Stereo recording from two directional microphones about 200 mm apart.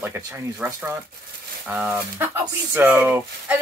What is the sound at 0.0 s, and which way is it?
Speech, 10° right (ahead or behind).